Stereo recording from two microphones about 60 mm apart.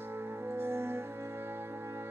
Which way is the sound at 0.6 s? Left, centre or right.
Right.